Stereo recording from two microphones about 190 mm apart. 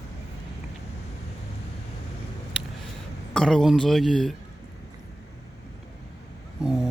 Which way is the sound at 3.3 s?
5° left (ahead or behind).